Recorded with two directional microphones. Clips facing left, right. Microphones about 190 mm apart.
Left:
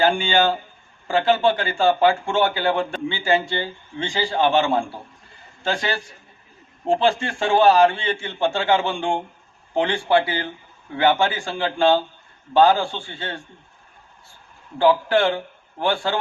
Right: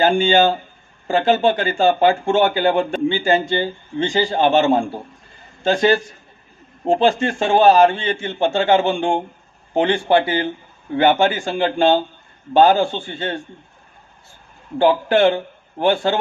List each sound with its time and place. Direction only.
0.0 s a man's voice: 20° right (ahead or behind)
14.8 s a man's voice: 20° right (ahead or behind)